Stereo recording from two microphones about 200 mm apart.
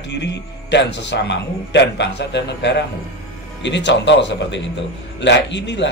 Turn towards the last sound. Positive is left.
turn(degrees=60)  # may be behind; listen again after turning